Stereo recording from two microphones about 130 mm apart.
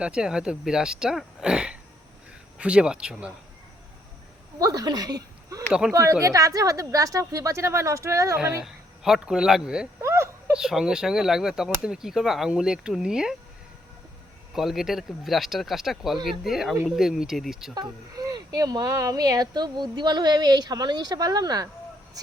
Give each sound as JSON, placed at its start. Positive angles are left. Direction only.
{"t": 0.0, "sound": "speech", "side_deg": -5}
{"t": 4.6, "sound": "a woman's voice", "side_deg": -25}
{"t": 8.6, "sound": "speech", "side_deg": 0}
{"t": 10.0, "sound": "a sound", "side_deg": -20}
{"t": 10.5, "sound": "speech", "side_deg": -5}
{"t": 14.5, "sound": "speech", "side_deg": 0}
{"t": 17.7, "sound": "speech", "side_deg": -25}